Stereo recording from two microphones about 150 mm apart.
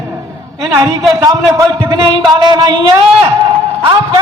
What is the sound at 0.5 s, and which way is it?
A man's voice, 20° right (ahead or behind).